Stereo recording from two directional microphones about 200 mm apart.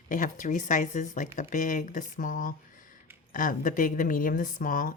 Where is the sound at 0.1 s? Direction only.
40° left (ahead or behind).